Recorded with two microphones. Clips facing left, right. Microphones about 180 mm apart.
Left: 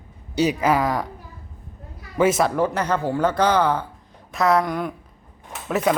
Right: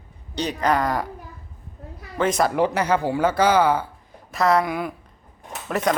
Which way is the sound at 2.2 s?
5° left (ahead or behind).